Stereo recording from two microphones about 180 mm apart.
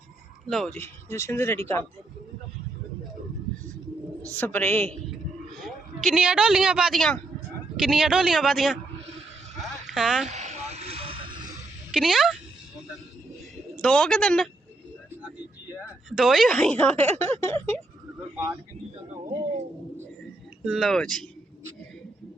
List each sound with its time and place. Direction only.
0.4 s a man's voice: centre (ahead or behind)
0.8 s speech: 15° left (ahead or behind)
4.4 s speech: 10° left (ahead or behind)
5.6 s a man's voice: centre (ahead or behind)
9.8 s speech: centre (ahead or behind)
10.2 s vehicle: 40° right (ahead or behind)
11.9 s a man's voice: centre (ahead or behind)
13.8 s a man's voice: 5° left (ahead or behind)
16.0 s speech: centre (ahead or behind)
20.7 s a man's voice: centre (ahead or behind)